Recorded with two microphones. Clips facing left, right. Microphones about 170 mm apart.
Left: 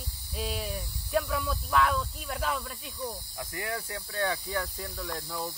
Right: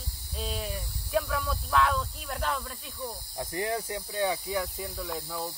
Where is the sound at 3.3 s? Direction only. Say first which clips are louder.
Right 8 dB; 25° right (ahead or behind).